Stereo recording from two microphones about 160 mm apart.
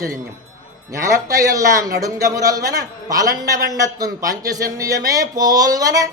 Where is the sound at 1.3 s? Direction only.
20° right (ahead or behind).